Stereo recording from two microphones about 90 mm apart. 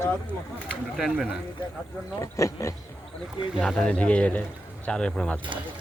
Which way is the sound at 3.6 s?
10° left (ahead or behind).